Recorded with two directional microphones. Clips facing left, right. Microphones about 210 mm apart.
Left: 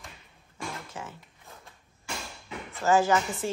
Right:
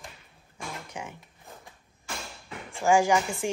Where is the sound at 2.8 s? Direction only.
10° right (ahead or behind).